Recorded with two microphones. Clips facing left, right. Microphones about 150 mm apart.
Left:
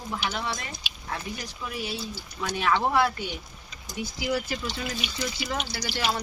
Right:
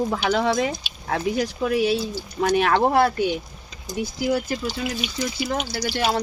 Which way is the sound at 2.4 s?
60° right (ahead or behind).